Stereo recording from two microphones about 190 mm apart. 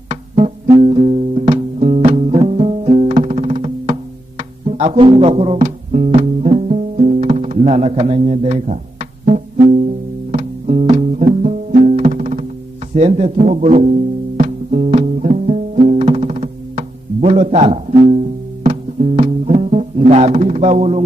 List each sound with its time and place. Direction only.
0.8 s music: 35° right (ahead or behind)
11.2 s music: 45° right (ahead or behind)